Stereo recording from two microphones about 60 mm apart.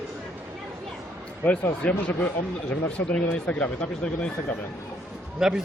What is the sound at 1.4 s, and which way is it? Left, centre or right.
Speech, left.